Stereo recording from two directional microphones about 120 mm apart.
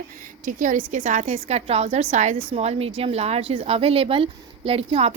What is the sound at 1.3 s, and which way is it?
A woman's voice, 60° right (ahead or behind).